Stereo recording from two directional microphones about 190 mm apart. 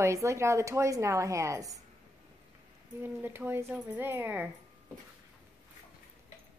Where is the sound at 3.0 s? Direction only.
10° right (ahead or behind).